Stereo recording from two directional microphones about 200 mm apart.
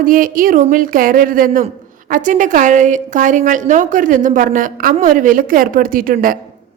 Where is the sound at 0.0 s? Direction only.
45° right (ahead or behind).